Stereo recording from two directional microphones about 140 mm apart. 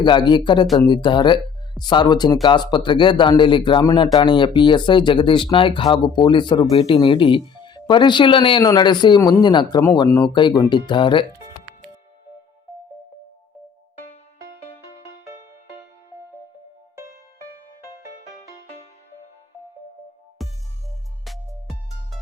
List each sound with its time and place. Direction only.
0.0 s speech: 35° left (ahead or behind)
20.4 s music: centre (ahead or behind)